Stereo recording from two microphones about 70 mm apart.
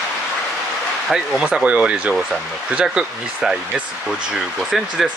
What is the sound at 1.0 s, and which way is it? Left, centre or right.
Speech, centre.